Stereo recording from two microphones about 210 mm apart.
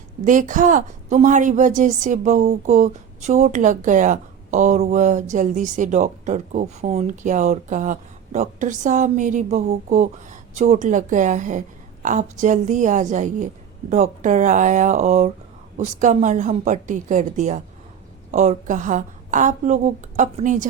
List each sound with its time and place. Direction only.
0.3 s speech: 35° right (ahead or behind)